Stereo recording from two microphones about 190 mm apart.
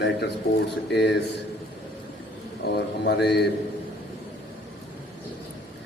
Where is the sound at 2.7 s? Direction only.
60° left (ahead or behind).